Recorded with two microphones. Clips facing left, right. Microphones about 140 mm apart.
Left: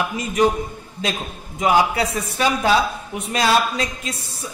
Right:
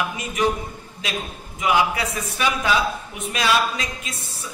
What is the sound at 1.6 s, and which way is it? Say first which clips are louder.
A man's voice: left 3 dB; 35° left (ahead or behind).